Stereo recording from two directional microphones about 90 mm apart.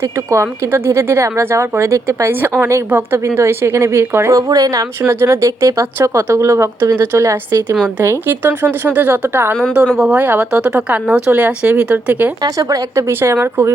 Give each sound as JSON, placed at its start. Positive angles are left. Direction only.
{"t": 0.0, "sound": "a woman's voice", "side_deg": -30}
{"t": 4.4, "sound": "speech", "side_deg": -40}
{"t": 6.0, "sound": "a woman's voice", "side_deg": -25}
{"t": 9.7, "sound": "speech", "side_deg": -10}
{"t": 10.2, "sound": "speech", "side_deg": -20}
{"t": 12.5, "sound": "speech", "side_deg": -40}
{"t": 13.1, "sound": "a woman's voice", "side_deg": -25}